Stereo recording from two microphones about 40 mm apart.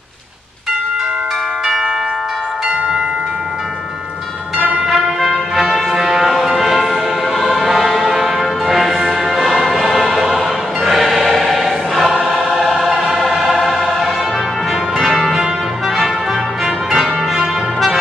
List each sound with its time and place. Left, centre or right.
5.2 s music: centre
10.2 s choir: centre
15.0 s change ringing: centre